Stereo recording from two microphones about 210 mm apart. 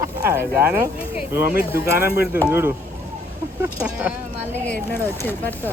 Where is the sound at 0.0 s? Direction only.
10° right (ahead or behind).